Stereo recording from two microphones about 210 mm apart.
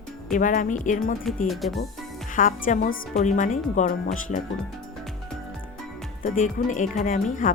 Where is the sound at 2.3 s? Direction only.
40° left (ahead or behind).